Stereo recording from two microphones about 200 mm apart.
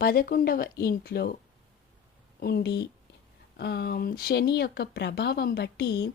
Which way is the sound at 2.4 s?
50° left (ahead or behind).